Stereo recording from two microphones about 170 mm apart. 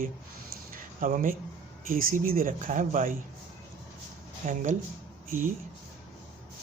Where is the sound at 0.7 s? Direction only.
50° right (ahead or behind).